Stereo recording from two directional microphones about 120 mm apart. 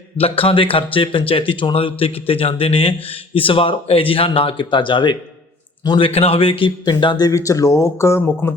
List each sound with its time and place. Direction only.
0.2 s a man's voice: 50° left (ahead or behind)
6.1 s speech: 55° left (ahead or behind); by 8.5 s 20° left (ahead or behind)